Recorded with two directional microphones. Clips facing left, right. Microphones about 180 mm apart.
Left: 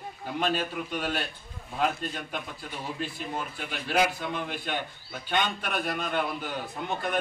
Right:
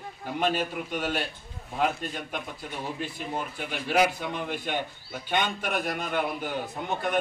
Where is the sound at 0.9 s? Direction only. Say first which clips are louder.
Right 2 dB; 15° right (ahead or behind).